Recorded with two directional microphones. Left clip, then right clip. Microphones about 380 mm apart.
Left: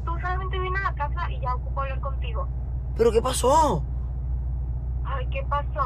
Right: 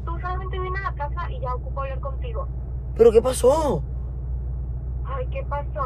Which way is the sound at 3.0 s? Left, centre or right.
Centre.